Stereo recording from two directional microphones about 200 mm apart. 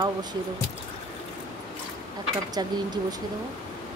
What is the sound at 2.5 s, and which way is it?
Speech, 20° right (ahead or behind).